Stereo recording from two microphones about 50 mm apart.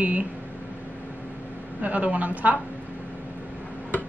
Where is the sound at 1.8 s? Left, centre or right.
Right.